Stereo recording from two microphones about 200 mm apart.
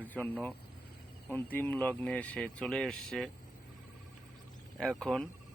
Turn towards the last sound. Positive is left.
turn(degrees=5)  # may be behind; listen again after turning